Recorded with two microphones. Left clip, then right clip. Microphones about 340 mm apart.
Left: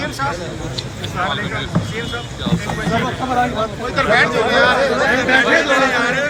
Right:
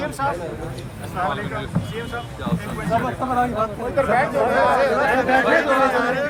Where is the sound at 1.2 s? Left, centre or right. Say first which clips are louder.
Left 3 dB; right.